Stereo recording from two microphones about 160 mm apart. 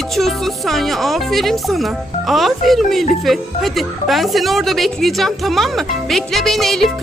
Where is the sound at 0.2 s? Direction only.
Centre (ahead or behind).